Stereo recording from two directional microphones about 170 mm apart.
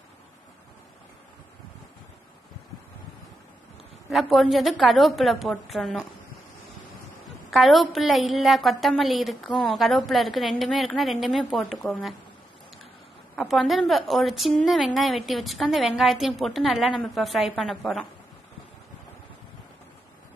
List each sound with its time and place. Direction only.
4.1 s a woman's voice: centre (ahead or behind)
7.2 s a woman's voice: centre (ahead or behind)
13.4 s a woman's voice: centre (ahead or behind)